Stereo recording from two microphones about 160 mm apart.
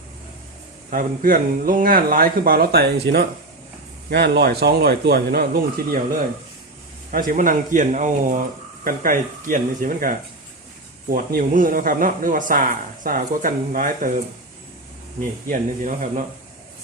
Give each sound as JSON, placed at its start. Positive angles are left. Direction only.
{"t": 0.9, "sound": "speech", "side_deg": -60}
{"t": 7.1, "sound": "speech", "side_deg": -60}
{"t": 15.4, "sound": "speech", "side_deg": -55}